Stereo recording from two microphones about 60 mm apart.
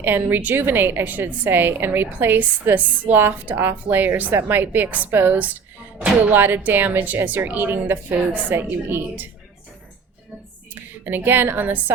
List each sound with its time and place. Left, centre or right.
0.0 s a woman's voice: right
11.0 s a woman's voice: right